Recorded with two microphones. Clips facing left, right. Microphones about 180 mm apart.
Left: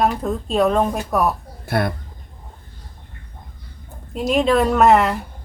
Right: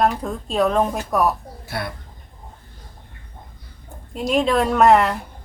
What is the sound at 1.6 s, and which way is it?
Speech, 55° left (ahead or behind).